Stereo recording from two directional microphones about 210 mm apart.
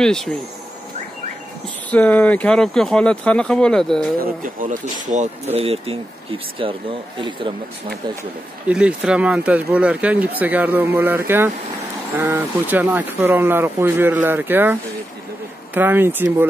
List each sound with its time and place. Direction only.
0.0 s speech: 5° left (ahead or behind)
1.9 s speech: 5° left (ahead or behind)
4.2 s speech: 40° right (ahead or behind); by 7.5 s 25° right (ahead or behind)
8.6 s speech: 5° right (ahead or behind)